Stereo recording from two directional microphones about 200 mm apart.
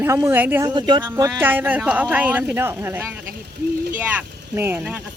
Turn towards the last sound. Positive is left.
turn(degrees=-10)  # may be behind; listen again after turning